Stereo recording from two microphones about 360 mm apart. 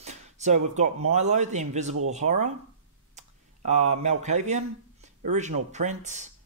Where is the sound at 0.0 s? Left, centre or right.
Centre.